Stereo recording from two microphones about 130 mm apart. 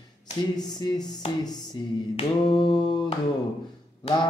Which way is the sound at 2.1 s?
40° left (ahead or behind).